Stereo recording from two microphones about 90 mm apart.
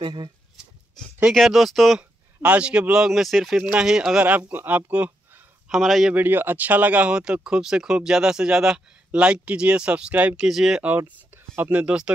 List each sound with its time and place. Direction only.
0.0 s speech: 65° right (ahead or behind)
1.0 s a sound: 5° left (ahead or behind)
1.3 s speech: centre (ahead or behind)
2.0 s speech: 10° right (ahead or behind)
4.3 s speech: 20° right (ahead or behind)
5.7 s speech: centre (ahead or behind)
6.1 s speech: 20° right (ahead or behind); by 10.8 s 5° right (ahead or behind)
10.8 s speech: 20° right (ahead or behind)